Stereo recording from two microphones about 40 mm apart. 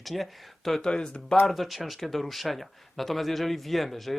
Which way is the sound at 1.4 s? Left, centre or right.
Centre.